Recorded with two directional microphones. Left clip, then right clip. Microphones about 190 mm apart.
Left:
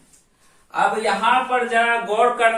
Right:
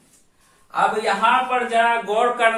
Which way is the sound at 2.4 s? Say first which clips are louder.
Right 1 dB; 15° right (ahead or behind).